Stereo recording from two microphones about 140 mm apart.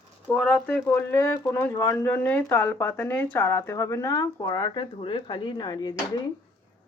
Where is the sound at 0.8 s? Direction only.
15° left (ahead or behind).